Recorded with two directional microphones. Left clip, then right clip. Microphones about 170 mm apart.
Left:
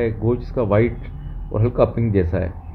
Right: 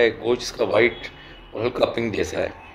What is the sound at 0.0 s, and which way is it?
A man's voice, 40° right (ahead or behind).